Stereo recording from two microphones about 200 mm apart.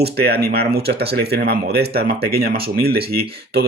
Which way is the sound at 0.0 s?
50° right (ahead or behind).